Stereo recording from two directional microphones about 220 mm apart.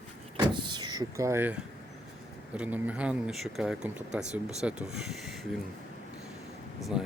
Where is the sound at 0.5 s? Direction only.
20° right (ahead or behind).